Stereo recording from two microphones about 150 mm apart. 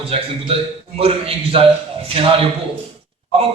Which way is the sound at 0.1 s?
40° right (ahead or behind).